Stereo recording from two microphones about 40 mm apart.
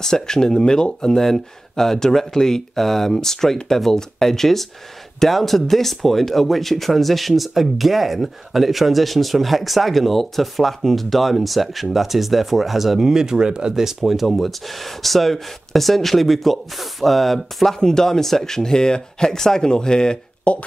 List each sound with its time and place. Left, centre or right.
0.0 s speech: centre; by 13.7 s right
13.7 s speech: centre
17.7 s speech: centre
20.5 s speech: left